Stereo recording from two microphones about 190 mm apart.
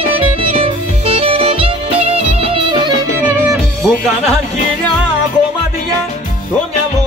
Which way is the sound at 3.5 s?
Centre (ahead or behind).